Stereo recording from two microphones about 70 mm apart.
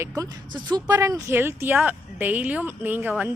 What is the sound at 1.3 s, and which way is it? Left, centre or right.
Speech, right.